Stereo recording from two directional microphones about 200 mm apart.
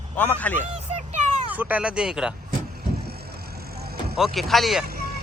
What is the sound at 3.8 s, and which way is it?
Music, 50° right (ahead or behind).